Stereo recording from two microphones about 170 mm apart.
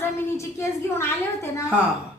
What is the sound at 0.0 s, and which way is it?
A woman's voice, 15° left (ahead or behind).